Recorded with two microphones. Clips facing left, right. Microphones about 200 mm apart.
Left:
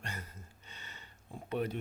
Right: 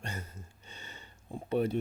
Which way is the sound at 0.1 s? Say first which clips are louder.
Right 4 dB; 25° right (ahead or behind).